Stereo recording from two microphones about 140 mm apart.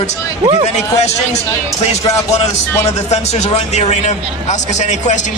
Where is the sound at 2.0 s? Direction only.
25° left (ahead or behind).